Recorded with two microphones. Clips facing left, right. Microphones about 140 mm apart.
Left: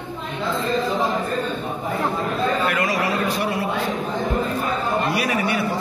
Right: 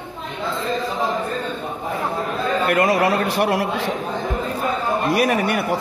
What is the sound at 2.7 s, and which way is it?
A man's voice, 55° right (ahead or behind).